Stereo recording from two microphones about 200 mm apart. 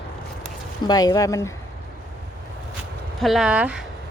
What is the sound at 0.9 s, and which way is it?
Speech, 20° left (ahead or behind).